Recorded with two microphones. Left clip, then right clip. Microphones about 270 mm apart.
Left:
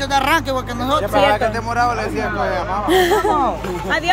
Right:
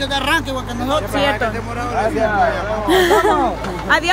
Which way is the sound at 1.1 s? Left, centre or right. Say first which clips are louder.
Left 3 dB; left.